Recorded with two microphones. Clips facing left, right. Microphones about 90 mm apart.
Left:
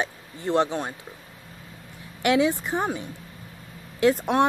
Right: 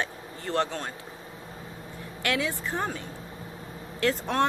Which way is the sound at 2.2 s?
20° left (ahead or behind).